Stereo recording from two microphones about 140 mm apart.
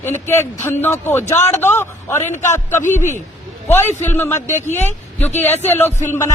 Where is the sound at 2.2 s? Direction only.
60° left (ahead or behind).